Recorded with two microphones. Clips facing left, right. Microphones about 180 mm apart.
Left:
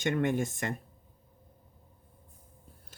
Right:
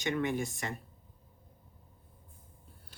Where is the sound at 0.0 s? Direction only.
50° left (ahead or behind).